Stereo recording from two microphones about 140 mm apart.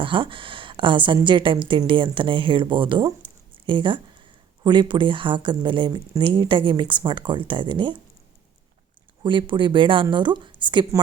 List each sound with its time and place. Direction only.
0.0 s a woman's voice: 35° right (ahead or behind)
9.2 s a woman's voice: 35° right (ahead or behind)